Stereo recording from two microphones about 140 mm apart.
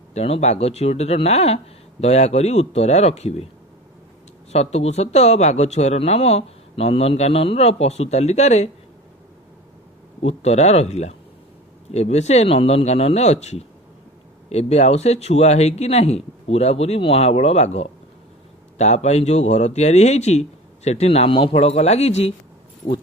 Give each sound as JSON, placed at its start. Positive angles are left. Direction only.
{"t": 0.1, "sound": "speech", "side_deg": 50}
{"t": 4.5, "sound": "speech", "side_deg": 50}
{"t": 10.2, "sound": "speech", "side_deg": 50}
{"t": 21.5, "sound": "speech", "side_deg": 50}